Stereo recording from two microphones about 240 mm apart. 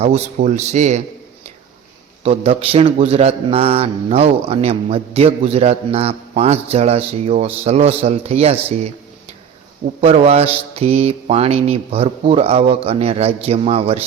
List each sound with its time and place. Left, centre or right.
0.0 s a man's voice: right
2.2 s a man's voice: right
10.0 s a man's voice: right